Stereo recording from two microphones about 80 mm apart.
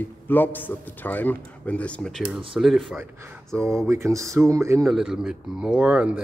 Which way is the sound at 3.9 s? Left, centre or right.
Right.